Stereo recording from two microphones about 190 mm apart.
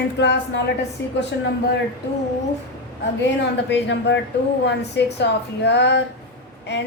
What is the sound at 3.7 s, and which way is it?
A woman's voice, 70° left (ahead or behind).